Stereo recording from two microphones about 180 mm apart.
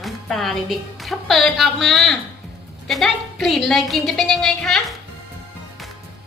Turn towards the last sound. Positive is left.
turn(degrees=0)  # may be behind; listen again after turning